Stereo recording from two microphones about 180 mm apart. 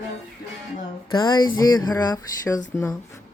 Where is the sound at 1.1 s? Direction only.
25° left (ahead or behind).